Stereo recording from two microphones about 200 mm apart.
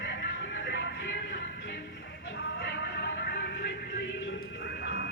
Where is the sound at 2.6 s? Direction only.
55° left (ahead or behind).